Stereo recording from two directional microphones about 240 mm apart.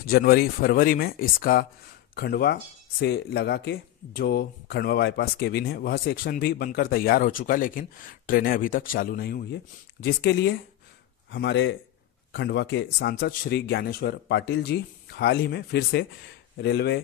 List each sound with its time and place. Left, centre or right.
0.0 s speech: left